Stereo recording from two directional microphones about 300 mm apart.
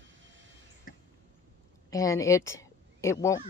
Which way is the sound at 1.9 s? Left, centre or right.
Centre.